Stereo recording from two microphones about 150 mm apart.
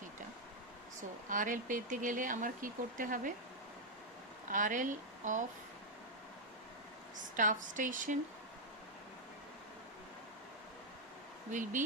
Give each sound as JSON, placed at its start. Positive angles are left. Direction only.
{"t": 1.3, "sound": "speech", "side_deg": -60}
{"t": 4.4, "sound": "a woman's voice", "side_deg": -60}
{"t": 7.3, "sound": "speech", "side_deg": -60}
{"t": 11.5, "sound": "speech", "side_deg": -60}